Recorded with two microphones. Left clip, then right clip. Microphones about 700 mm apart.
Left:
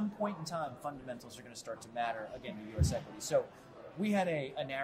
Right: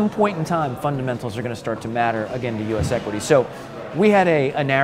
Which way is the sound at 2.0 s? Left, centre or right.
Right.